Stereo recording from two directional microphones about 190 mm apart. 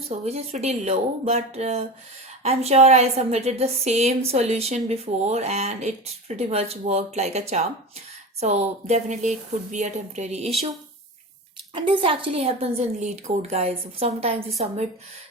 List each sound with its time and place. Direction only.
0.1 s a woman's voice: 35° right (ahead or behind)
11.7 s a woman's voice: 30° right (ahead or behind)